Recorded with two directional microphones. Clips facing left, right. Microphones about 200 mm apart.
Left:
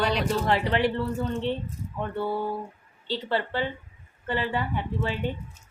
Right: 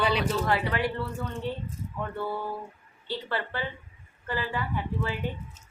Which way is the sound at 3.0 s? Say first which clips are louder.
Left 4 dB; 25° left (ahead or behind).